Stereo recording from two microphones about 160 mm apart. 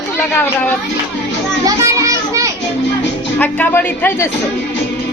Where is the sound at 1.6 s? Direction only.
20° right (ahead or behind).